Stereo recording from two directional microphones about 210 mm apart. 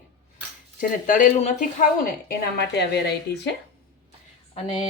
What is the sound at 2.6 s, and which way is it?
Speech, 55° left (ahead or behind).